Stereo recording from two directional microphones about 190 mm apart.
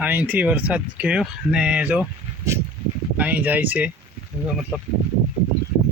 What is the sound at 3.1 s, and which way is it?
Speech, 10° right (ahead or behind).